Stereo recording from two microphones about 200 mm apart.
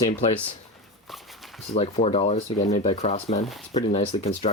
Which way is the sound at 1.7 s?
30° left (ahead or behind).